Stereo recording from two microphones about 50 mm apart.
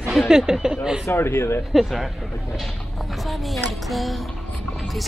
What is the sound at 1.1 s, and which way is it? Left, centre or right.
Speech, left.